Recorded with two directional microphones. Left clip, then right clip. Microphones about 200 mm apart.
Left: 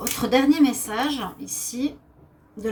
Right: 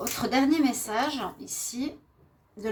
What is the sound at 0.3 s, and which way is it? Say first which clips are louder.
A woman's voice: left 6 dB; 45° right (ahead or behind).